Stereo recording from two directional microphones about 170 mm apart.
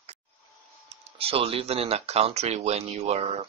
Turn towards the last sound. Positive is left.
turn(degrees=-40)  # may be behind; listen again after turning